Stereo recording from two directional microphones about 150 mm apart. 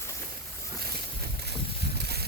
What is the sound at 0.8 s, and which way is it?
Boat, 90° right.